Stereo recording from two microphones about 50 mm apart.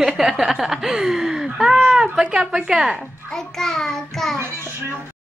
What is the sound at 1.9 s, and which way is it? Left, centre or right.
Speech, centre.